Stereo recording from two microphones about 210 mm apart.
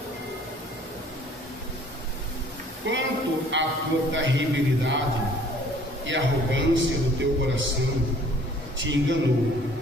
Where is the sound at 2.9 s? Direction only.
60° right (ahead or behind).